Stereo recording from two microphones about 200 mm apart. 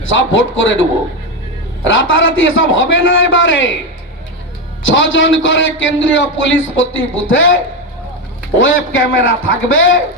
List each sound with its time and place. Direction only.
0.1 s a man's voice: 70° left (ahead or behind)
4.9 s a man's voice: 70° left (ahead or behind)
8.5 s a man's voice: 75° left (ahead or behind)